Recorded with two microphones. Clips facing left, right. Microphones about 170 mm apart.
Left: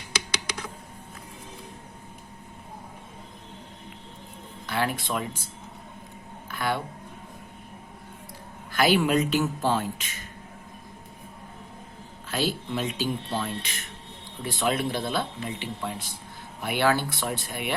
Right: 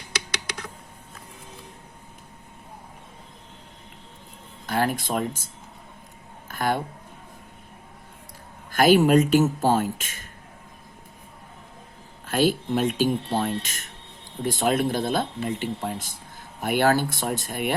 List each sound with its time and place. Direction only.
4.6 s speech: 45° right (ahead or behind)
6.5 s a sound: 45° right (ahead or behind)
8.7 s speech: 45° right (ahead or behind)
12.3 s speech: 50° right (ahead or behind)